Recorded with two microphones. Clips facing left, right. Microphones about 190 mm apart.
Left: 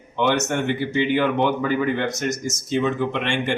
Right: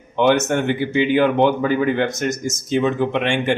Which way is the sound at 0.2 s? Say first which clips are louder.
Right 5 dB; 50° right (ahead or behind).